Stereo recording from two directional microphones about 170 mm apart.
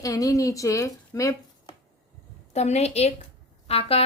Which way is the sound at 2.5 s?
40° left (ahead or behind).